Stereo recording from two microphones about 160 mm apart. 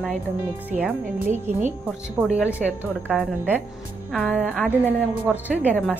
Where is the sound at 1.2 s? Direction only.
50° right (ahead or behind).